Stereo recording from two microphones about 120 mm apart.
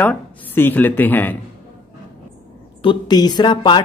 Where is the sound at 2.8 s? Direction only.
40° left (ahead or behind).